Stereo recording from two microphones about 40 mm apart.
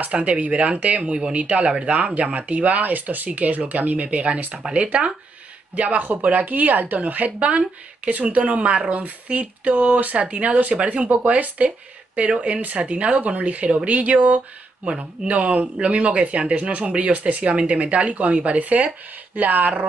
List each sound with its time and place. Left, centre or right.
0.0 s speech: right